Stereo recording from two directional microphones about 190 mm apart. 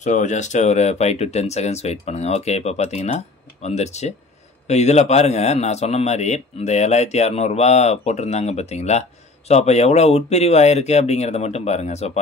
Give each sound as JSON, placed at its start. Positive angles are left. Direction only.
{"t": 0.0, "sound": "a man's voice", "side_deg": 40}